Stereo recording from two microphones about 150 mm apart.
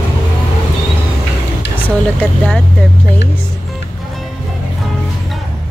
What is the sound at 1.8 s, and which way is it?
Speech, 10° left (ahead or behind).